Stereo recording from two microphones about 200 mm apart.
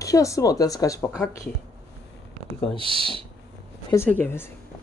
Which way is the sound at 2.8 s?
25° right (ahead or behind).